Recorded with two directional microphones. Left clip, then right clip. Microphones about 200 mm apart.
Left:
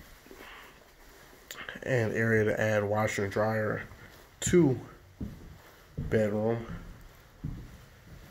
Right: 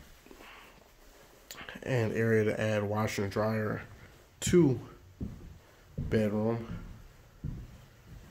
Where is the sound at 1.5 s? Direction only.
10° right (ahead or behind).